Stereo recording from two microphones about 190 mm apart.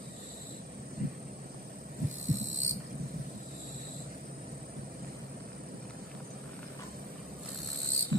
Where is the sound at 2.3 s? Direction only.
85° right.